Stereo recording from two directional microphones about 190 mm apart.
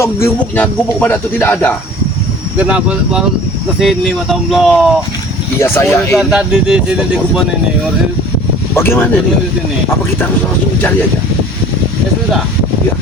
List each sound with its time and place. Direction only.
0.0 s speech: 10° left (ahead or behind)
2.6 s speech: 5° right (ahead or behind)
5.5 s speech: 10° left (ahead or behind)
6.1 s speech: 5° right (ahead or behind)
8.7 s speech: 10° left (ahead or behind)